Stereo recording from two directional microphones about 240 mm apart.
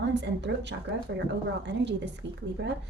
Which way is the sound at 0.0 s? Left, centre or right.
Right.